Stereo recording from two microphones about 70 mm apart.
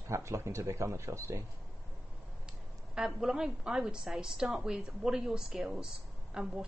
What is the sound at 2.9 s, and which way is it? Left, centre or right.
A woman's voice, centre.